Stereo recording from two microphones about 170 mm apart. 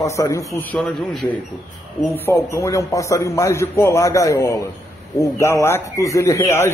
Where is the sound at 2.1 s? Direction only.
15° left (ahead or behind).